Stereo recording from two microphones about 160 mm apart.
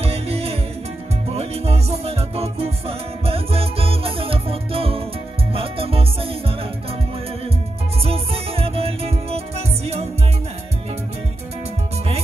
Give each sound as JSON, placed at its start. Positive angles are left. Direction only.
{"t": 0.0, "sound": "music", "side_deg": -40}
{"t": 8.0, "sound": "music", "side_deg": -35}